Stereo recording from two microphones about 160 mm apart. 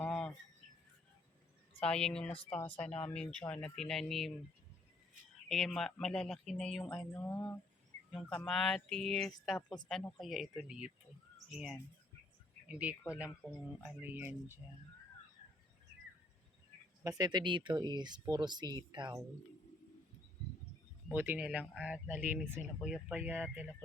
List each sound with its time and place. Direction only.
0.0 s bird: 5° left (ahead or behind)
1.9 s speech: 5° left (ahead or behind)
5.5 s speech: centre (ahead or behind)
7.1 s speech: 15° left (ahead or behind)
8.4 s speech: 5° left (ahead or behind)
14.0 s speech: 10° right (ahead or behind)
17.0 s speech: 25° right (ahead or behind)
21.1 s speech: 15° right (ahead or behind)